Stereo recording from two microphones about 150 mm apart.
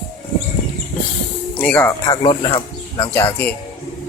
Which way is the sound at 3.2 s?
15° left (ahead or behind).